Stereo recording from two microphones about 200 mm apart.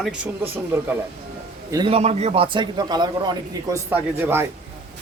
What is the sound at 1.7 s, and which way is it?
A man's voice, 25° right (ahead or behind).